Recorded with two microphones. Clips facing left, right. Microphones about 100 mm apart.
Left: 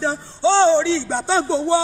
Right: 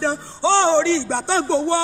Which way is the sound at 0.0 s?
70° right (ahead or behind).